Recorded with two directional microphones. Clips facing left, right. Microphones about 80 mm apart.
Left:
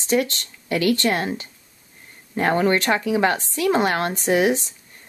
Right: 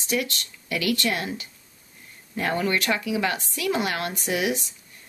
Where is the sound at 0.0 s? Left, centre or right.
Left.